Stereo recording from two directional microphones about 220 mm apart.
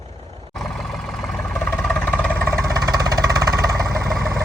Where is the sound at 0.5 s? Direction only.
Centre (ahead or behind).